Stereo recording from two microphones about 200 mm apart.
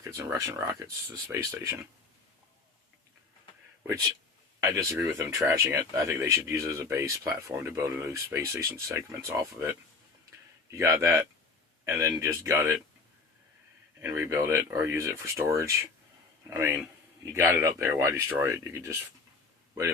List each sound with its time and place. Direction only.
0.0 s speech: 15° right (ahead or behind)
4.6 s speech: 15° right (ahead or behind)
14.0 s speech: 15° right (ahead or behind)